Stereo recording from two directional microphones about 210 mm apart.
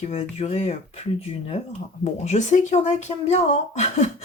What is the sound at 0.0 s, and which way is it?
Speech, 30° left (ahead or behind).